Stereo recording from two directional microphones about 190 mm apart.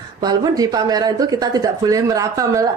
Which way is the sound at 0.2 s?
20° right (ahead or behind).